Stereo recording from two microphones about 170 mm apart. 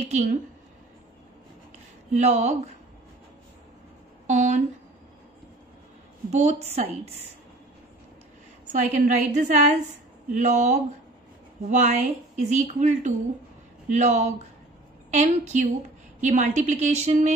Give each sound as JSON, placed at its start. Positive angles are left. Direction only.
{"t": 0.0, "sound": "a woman's voice", "side_deg": -40}
{"t": 2.1, "sound": "a woman's voice", "side_deg": -40}
{"t": 4.3, "sound": "a woman's voice", "side_deg": -45}
{"t": 6.3, "sound": "a woman's voice", "side_deg": -40}
{"t": 8.8, "sound": "a woman's voice", "side_deg": -45}